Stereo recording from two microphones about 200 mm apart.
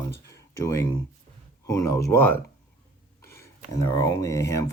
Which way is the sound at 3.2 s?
15° left (ahead or behind).